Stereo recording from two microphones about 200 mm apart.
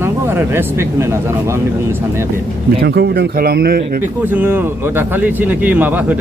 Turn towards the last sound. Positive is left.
turn(degrees=-10)  # may be behind; listen again after turning